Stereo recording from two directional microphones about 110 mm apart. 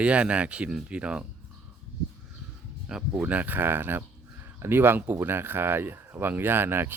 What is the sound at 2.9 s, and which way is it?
Speech, 10° right (ahead or behind).